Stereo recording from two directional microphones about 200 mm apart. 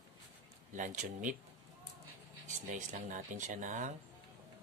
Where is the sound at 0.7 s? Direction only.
40° right (ahead or behind).